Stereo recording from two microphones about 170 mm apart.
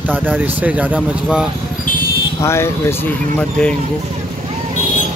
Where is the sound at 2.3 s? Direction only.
15° left (ahead or behind).